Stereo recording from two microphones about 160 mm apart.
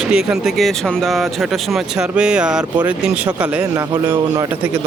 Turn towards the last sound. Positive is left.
turn(degrees=-15)  # may be behind; listen again after turning